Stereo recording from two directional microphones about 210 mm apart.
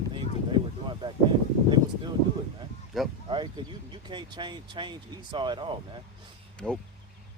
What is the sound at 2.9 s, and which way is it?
Speech, centre (ahead or behind).